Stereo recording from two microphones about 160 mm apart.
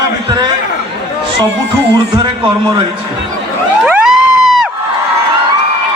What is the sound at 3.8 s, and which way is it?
Crowd, centre (ahead or behind).